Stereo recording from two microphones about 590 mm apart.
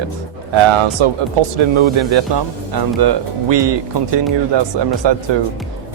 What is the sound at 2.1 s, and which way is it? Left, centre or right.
Speech, right.